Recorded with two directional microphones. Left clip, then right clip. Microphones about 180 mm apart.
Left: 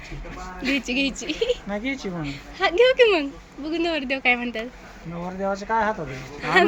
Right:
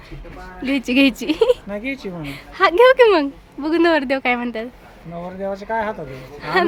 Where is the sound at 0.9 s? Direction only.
40° right (ahead or behind).